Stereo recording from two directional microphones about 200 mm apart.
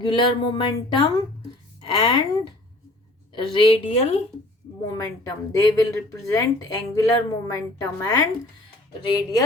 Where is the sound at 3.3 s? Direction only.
25° left (ahead or behind).